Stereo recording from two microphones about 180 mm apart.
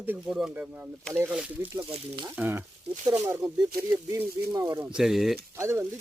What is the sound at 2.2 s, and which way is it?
Speech, 10° right (ahead or behind).